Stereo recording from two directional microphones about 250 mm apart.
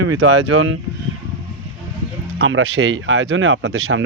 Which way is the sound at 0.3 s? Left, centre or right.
Right.